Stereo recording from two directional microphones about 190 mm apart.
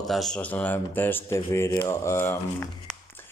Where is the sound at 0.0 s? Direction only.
Centre (ahead or behind).